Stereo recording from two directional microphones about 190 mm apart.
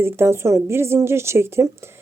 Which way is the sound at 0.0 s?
10° right (ahead or behind).